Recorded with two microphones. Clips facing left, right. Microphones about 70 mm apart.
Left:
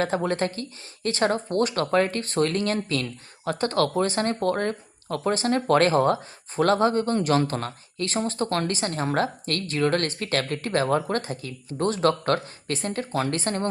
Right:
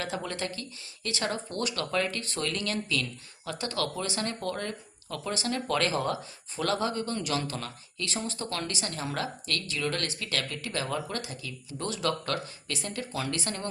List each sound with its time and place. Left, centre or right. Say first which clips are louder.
0.0 s speech: left 9 dB; left